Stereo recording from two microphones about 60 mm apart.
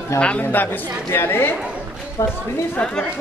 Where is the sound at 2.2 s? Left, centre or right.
Left.